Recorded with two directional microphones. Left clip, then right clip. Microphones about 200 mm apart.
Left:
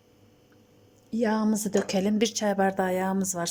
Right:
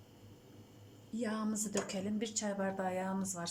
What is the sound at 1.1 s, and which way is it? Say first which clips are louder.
A woman's voice: left 13 dB; 45° left (ahead or behind).